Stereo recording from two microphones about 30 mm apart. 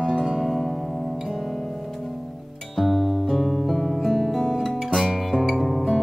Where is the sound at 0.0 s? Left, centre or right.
Right.